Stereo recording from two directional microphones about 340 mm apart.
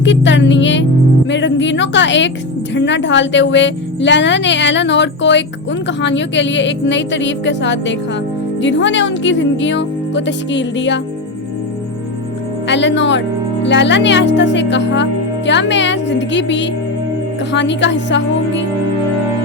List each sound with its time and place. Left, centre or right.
0.0 s a woman's voice: left
12.6 s a woman's voice: left